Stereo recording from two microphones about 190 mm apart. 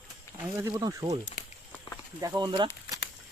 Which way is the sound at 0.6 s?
20° right (ahead or behind).